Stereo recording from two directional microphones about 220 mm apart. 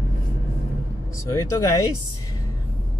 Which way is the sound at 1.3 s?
15° left (ahead or behind).